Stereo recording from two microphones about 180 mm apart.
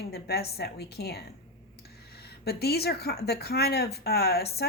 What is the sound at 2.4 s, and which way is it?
Speech, 60° left (ahead or behind).